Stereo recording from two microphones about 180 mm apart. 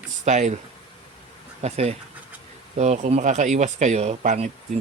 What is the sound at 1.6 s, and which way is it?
Speech, 35° right (ahead or behind).